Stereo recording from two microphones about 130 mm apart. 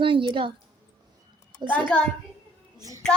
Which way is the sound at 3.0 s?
5° left (ahead or behind).